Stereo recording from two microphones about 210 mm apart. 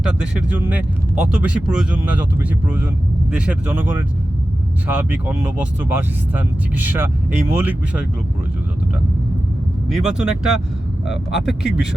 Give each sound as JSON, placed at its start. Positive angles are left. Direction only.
{"t": 0.3, "sound": "speech", "side_deg": -5}
{"t": 9.9, "sound": "speech", "side_deg": -5}